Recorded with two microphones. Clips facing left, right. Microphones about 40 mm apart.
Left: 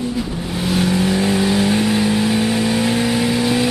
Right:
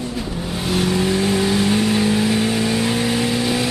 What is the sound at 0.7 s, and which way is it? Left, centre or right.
Vehicle, centre.